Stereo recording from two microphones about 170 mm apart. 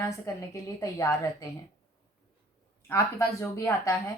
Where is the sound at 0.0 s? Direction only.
15° left (ahead or behind).